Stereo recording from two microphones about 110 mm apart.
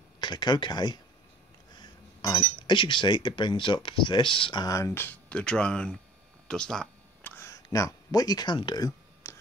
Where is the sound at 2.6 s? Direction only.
50° left (ahead or behind).